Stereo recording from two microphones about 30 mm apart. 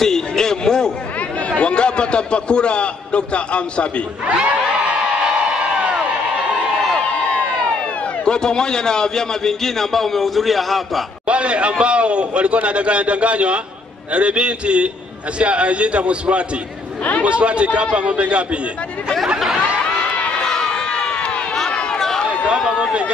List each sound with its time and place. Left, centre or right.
0.0 s a man's voice: centre
1.6 s a man's voice: left
8.3 s a man's voice: left; by 11.1 s centre
11.2 s a man's voice: right
20.3 s run: centre
21.9 s a sound: centre